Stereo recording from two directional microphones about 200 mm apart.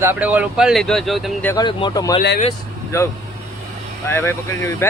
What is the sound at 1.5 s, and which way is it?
Speech, 20° left (ahead or behind).